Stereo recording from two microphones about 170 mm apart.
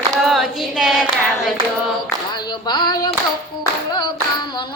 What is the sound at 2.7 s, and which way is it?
Clapping, 25° left (ahead or behind).